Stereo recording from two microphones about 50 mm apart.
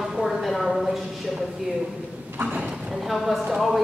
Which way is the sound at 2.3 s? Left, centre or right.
Right.